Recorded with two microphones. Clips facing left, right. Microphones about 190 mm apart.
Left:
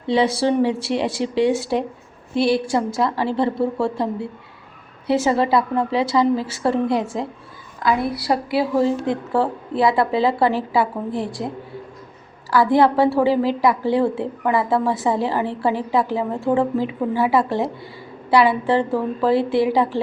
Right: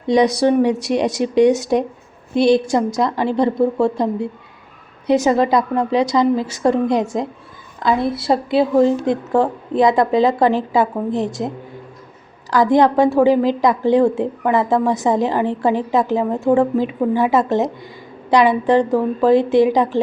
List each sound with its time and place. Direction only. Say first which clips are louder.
0.1 s a woman's voice: right 4 dB; 15° right (ahead or behind)
12.7 s a woman's voice: right 3 dB; 20° right (ahead or behind)